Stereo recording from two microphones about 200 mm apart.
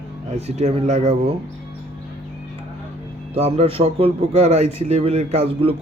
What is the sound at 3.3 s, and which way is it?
A man's voice, 30° right (ahead or behind).